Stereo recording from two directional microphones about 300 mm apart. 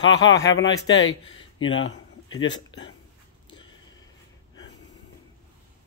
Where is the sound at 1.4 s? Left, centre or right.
Centre.